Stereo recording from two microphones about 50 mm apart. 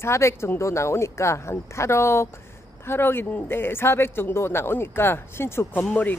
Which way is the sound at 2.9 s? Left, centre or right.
Left.